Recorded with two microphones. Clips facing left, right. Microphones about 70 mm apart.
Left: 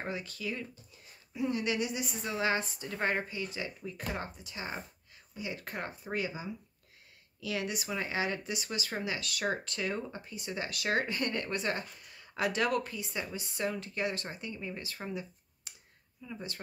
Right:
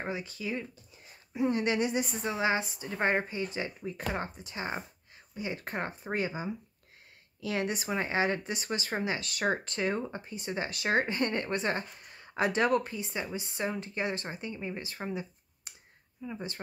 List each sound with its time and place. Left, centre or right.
0.0 s speech: right
1.3 s a woman's voice: right